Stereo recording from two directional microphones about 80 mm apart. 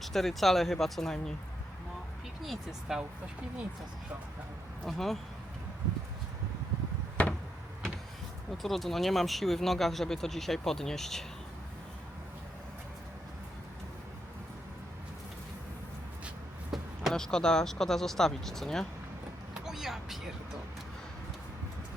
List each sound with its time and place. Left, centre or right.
0.0 s speech: centre
2.4 s speech: centre
4.9 s speech: centre
7.2 s a sound: left
8.6 s speech: centre
16.7 s speech: centre
19.5 s vehicle: centre